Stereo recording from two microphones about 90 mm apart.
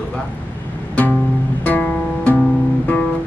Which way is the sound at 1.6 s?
20° left (ahead or behind).